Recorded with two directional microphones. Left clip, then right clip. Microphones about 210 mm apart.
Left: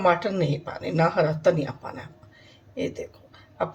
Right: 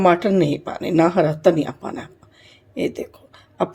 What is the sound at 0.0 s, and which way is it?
Speech, 40° right (ahead or behind).